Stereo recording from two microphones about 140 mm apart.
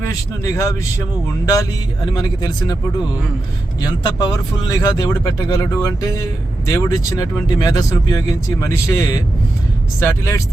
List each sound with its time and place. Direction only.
0.4 s speech: 20° left (ahead or behind)
2.1 s speech: 30° left (ahead or behind)
3.8 s speech: 30° left (ahead or behind)